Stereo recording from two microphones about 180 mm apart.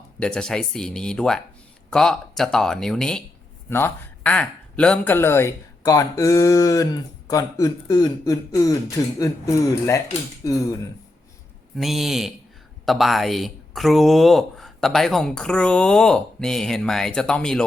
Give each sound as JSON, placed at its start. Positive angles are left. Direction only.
{"t": 0.2, "sound": "speech", "side_deg": 5}
{"t": 11.8, "sound": "speech", "side_deg": 0}